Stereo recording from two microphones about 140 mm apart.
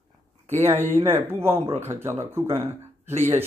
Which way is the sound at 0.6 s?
15° right (ahead or behind).